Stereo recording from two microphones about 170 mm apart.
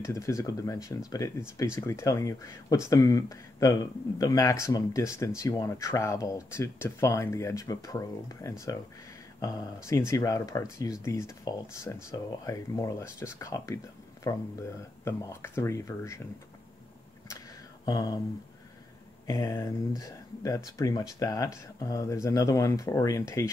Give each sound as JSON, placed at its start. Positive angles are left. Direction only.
{"t": 0.0, "sound": "speech", "side_deg": 20}
{"t": 17.8, "sound": "speech", "side_deg": 20}
{"t": 19.2, "sound": "speech", "side_deg": 20}